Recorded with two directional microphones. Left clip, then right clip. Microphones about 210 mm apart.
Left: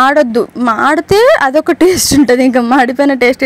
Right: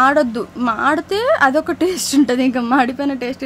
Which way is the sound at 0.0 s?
30° left (ahead or behind).